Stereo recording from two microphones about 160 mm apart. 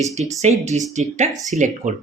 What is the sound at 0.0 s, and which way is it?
Speech, 45° right (ahead or behind).